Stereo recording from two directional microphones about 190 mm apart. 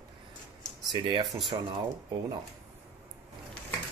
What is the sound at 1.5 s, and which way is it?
Speech, 25° right (ahead or behind).